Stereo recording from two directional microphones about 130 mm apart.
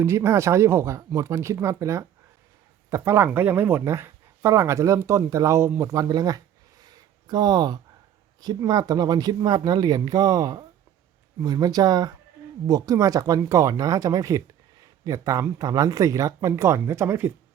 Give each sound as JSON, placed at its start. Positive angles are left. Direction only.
{"t": 0.0, "sound": "speech", "side_deg": -20}
{"t": 6.8, "sound": "a sound", "side_deg": -30}
{"t": 8.4, "sound": "speech", "side_deg": -30}